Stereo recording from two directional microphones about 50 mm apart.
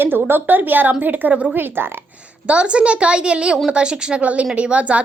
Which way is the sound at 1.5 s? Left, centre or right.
Right.